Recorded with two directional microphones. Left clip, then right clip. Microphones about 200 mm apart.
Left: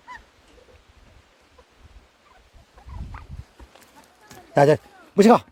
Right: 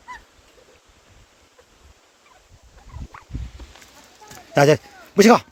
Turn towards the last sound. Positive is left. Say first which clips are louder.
# right 2 dB
turn(degrees=0)  # may be behind; listen again after turning